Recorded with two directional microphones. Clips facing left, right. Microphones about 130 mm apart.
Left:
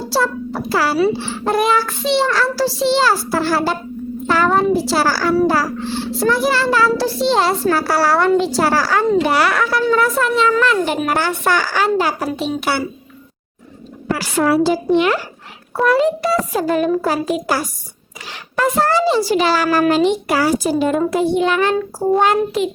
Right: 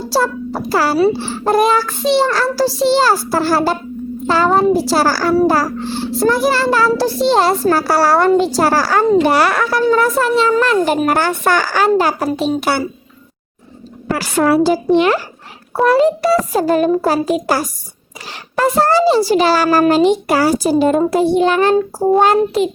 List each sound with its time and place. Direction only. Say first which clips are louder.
0.1 s a child's voice: right 2 dB; 40° right (ahead or behind)
14.1 s a woman's voice: right 2 dB; 45° right (ahead or behind)
14.8 s a child's voice: right 3 dB; 35° right (ahead or behind)